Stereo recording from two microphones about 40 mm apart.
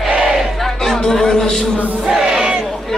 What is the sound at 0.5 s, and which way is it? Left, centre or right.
Music, centre.